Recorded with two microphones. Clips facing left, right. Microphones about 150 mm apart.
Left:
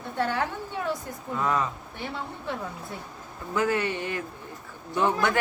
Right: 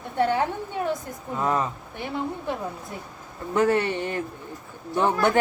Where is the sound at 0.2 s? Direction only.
20° right (ahead or behind).